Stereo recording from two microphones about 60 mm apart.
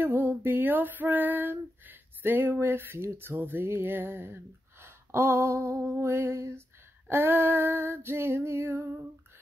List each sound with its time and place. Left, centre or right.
0.0 s female singing: right
3.2 s speech: right
7.1 s speech: right